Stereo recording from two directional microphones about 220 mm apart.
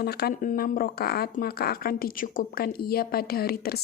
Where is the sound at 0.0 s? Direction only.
45° left (ahead or behind).